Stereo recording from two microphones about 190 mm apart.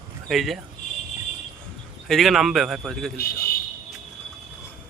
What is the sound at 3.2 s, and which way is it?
Speech, 55° left (ahead or behind).